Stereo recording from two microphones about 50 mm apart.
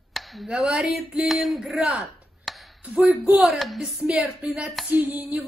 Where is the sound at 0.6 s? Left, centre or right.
Centre.